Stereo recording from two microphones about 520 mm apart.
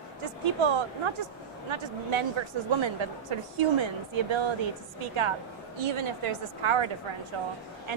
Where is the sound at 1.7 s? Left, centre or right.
Right.